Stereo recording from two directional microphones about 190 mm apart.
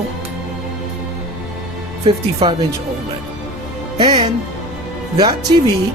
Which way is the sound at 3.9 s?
25° right (ahead or behind).